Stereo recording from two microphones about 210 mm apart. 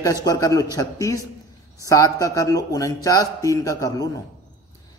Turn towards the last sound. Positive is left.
turn(degrees=15)  # may be behind; listen again after turning